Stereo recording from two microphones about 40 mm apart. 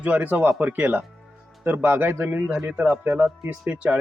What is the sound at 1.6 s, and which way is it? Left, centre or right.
Speech, right.